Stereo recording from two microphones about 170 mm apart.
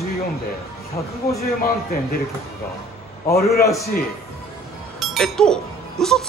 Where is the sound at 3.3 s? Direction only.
65° left (ahead or behind).